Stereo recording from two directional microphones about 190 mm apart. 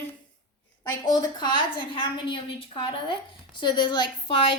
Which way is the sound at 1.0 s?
20° left (ahead or behind).